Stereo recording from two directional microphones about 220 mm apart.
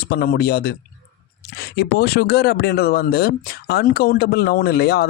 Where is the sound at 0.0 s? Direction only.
45° left (ahead or behind).